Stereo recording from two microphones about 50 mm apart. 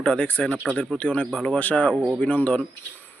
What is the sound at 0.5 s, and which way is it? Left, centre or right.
Speech, right.